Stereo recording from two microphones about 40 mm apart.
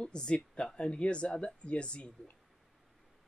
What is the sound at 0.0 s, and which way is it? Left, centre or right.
Speech, left.